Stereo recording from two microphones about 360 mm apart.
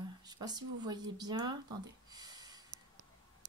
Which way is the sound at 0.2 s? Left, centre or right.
Centre.